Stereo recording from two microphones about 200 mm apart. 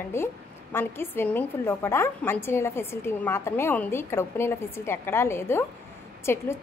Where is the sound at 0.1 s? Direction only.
10° left (ahead or behind).